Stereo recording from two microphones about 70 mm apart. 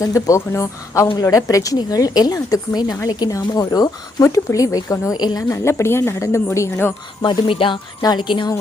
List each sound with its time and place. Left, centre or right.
0.0 s a woman's voice: left
3.3 s speech: left
5.1 s a woman's voice: left
5.5 s a woman's voice: left
8.0 s a woman's voice: left